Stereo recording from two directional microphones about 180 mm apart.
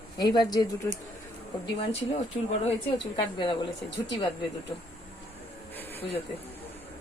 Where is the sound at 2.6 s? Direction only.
25° left (ahead or behind).